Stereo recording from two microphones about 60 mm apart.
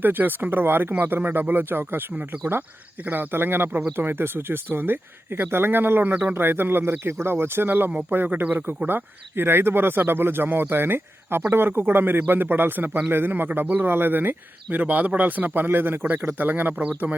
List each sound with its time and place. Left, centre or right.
0.0 s speech: right